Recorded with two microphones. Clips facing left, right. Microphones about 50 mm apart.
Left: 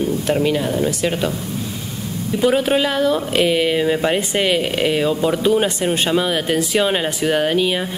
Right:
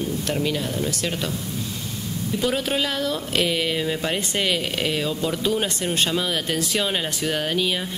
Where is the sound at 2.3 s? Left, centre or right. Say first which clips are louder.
Left 8 dB; centre.